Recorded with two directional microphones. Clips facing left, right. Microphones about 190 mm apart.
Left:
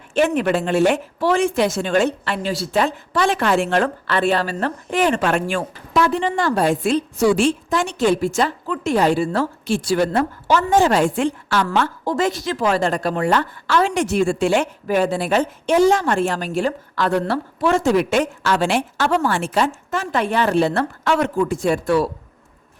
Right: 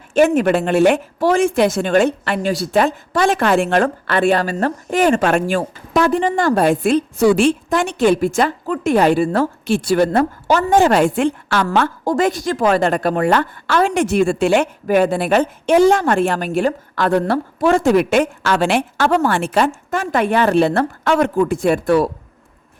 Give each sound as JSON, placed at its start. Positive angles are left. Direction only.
{"t": 0.1, "sound": "speech", "side_deg": -45}
{"t": 11.6, "sound": "a woman's voice", "side_deg": -50}